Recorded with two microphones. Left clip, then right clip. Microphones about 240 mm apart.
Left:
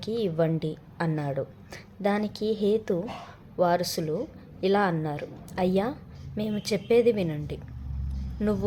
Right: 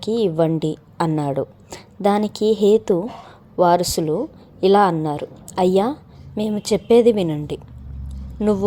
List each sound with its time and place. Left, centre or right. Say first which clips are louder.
0.0 s a woman's voice: right 8 dB; right